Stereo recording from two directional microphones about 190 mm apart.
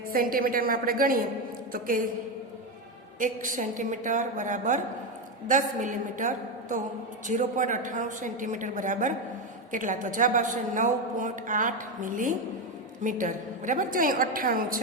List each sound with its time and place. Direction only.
0.1 s a woman's voice: 50° right (ahead or behind)
3.2 s a woman's voice: 45° right (ahead or behind)